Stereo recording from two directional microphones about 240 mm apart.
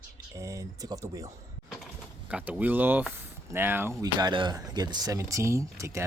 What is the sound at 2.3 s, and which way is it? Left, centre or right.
Speech, centre.